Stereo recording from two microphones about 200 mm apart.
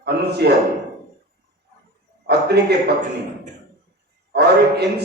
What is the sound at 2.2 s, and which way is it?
Speech, 55° right (ahead or behind).